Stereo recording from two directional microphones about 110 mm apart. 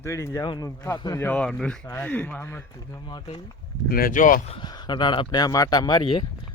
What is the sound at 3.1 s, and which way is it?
Speech, 40° left (ahead or behind).